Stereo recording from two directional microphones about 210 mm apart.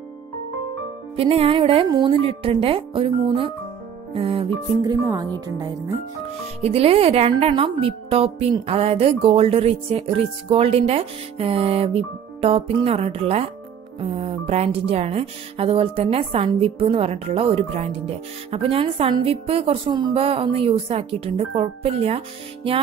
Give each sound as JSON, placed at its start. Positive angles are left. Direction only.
{"t": 1.1, "sound": "speech", "side_deg": -30}
{"t": 6.6, "sound": "speech", "side_deg": -30}